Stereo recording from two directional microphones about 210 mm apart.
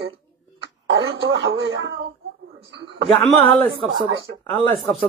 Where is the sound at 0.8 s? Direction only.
60° right (ahead or behind).